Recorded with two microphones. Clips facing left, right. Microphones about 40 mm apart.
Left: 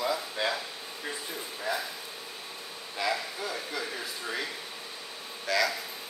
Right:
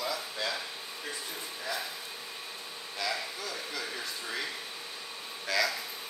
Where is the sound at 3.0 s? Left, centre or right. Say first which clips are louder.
Left 4 dB; centre.